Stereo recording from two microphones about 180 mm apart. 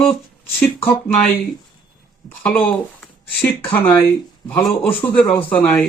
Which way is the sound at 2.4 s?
10° left (ahead or behind).